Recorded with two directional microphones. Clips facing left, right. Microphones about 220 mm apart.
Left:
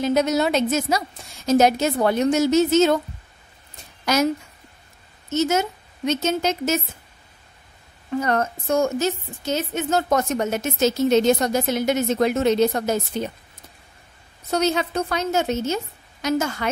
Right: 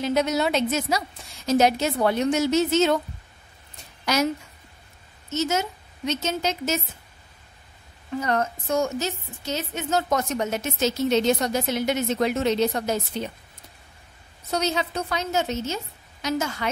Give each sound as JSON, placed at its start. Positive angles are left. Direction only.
{"t": 0.0, "sound": "a woman's voice", "side_deg": 45}
{"t": 4.0, "sound": "a woman's voice", "side_deg": 45}
{"t": 5.3, "sound": "a woman's voice", "side_deg": 50}
{"t": 8.2, "sound": "a woman's voice", "side_deg": 50}
{"t": 14.5, "sound": "a woman's voice", "side_deg": 50}